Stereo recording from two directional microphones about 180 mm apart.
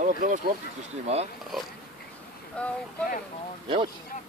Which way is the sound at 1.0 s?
35° right (ahead or behind).